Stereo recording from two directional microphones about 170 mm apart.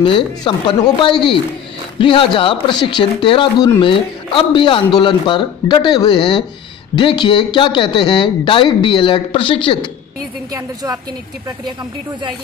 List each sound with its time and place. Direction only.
0.4 s speech: 25° left (ahead or behind)
10.5 s a woman's voice: 20° right (ahead or behind)